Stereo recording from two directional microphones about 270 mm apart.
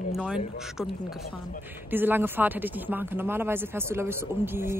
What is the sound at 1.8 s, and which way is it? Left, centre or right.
Speech, centre.